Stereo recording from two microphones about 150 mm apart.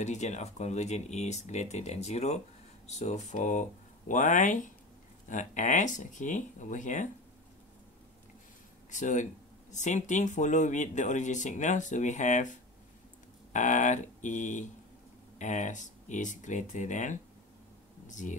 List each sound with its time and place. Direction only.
0.0 s speech: 50° left (ahead or behind)
8.9 s speech: 55° left (ahead or behind)
13.5 s speech: 55° left (ahead or behind)